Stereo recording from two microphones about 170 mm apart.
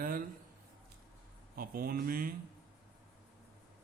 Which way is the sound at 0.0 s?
55° right (ahead or behind).